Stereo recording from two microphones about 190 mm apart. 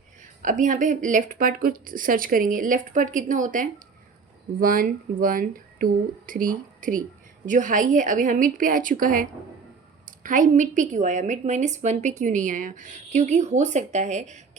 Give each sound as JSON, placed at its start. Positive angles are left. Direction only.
{"t": 0.2, "sound": "a woman's voice", "side_deg": -40}